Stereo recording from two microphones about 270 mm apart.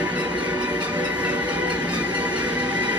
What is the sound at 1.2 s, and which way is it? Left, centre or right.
Music, centre.